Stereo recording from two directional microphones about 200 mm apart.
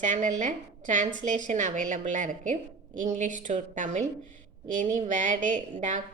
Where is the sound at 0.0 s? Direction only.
40° right (ahead or behind).